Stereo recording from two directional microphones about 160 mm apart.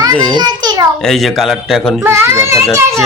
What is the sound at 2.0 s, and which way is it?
Speech, 15° right (ahead or behind).